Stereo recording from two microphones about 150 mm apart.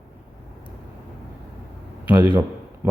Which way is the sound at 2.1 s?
15° right (ahead or behind).